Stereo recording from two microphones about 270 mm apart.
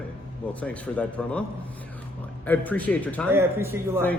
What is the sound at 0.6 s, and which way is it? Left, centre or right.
Speech, centre.